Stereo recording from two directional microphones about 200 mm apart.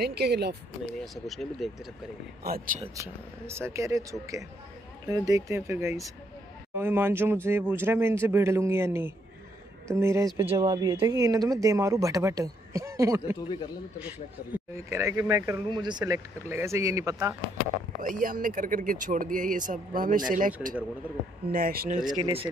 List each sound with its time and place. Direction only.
0.0 s speech: 55° right (ahead or behind)
0.9 s speech: centre (ahead or behind)
2.4 s speech: 50° right (ahead or behind)
3.0 s speech: 15° right (ahead or behind)
18.0 s speech: 45° right (ahead or behind)
22.2 s speech: 25° right (ahead or behind)